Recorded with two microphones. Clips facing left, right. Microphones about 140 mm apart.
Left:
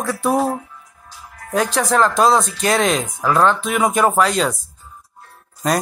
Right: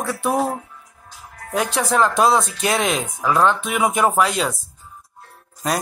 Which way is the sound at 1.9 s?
10° right (ahead or behind).